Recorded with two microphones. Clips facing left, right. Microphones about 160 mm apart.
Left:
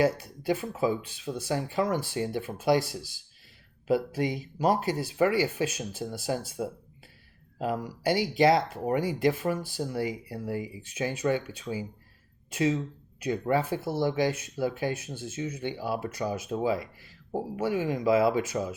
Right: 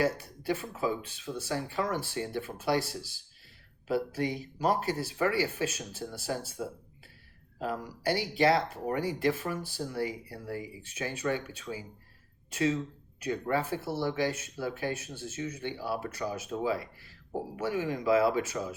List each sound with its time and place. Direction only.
0.0 s speech: 15° left (ahead or behind)
7.6 s speech: 15° left (ahead or behind)